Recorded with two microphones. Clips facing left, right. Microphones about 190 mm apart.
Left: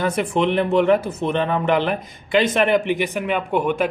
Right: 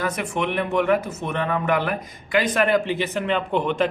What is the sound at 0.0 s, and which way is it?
A man's voice, 30° left (ahead or behind).